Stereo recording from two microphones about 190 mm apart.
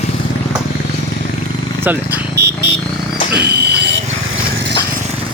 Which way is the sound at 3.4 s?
60° right (ahead or behind).